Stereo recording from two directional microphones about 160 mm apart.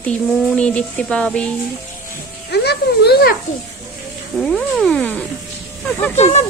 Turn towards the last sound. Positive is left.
turn(degrees=45)  # may be behind; listen again after turning